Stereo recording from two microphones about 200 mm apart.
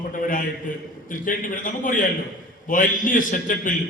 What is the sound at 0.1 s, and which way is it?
A man's voice, 40° left (ahead or behind).